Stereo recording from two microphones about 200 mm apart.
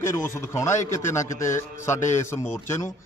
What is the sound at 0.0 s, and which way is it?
A man's voice, 15° left (ahead or behind).